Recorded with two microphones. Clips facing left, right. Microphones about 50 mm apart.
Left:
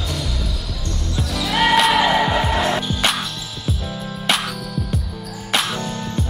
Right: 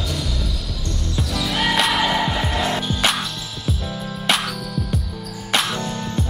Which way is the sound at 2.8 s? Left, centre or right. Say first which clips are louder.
Even; centre.